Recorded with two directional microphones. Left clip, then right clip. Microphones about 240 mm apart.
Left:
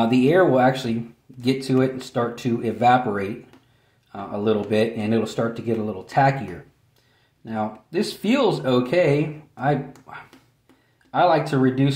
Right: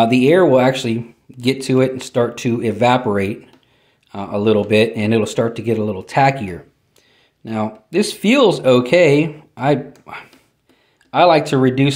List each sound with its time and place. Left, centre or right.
0.0 s speech: right
7.4 s speech: right